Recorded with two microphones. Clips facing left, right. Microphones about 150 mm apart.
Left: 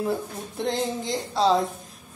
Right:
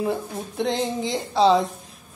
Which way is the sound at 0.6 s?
Centre (ahead or behind).